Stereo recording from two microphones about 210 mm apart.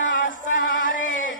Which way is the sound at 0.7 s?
65° left (ahead or behind).